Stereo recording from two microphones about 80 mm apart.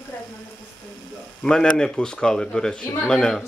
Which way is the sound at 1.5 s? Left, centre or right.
Centre.